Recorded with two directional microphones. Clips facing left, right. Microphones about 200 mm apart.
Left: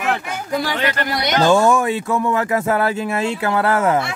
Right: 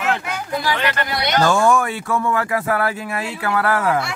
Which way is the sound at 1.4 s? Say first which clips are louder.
Left 2 dB; 20° left (ahead or behind).